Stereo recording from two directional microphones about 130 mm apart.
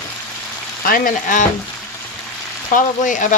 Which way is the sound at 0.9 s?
90° left.